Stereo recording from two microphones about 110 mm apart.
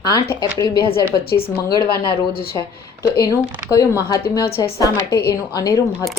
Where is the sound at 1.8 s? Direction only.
50° left (ahead or behind).